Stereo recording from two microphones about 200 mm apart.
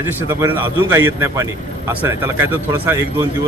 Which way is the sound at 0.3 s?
10° right (ahead or behind).